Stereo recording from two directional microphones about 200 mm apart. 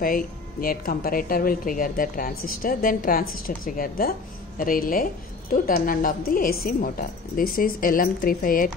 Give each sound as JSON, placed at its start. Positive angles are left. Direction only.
{"t": 0.0, "sound": "speech", "side_deg": 45}